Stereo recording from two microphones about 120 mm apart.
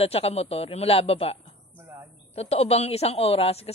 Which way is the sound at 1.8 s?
20° right (ahead or behind).